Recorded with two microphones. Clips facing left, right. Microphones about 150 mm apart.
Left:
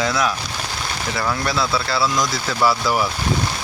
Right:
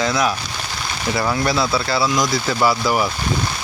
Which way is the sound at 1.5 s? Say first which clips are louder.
Right 2 dB; 25° right (ahead or behind).